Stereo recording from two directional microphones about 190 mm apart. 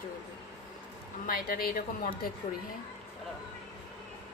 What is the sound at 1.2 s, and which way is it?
A woman's voice, 50° left (ahead or behind).